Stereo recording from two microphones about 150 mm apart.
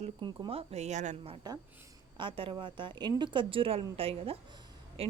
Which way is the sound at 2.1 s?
35° right (ahead or behind).